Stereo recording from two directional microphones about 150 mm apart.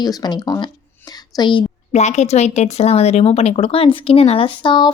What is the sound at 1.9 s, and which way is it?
Speech, 50° left (ahead or behind).